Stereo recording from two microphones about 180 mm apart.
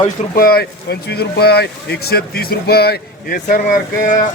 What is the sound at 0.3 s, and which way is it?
Speech, 55° left (ahead or behind).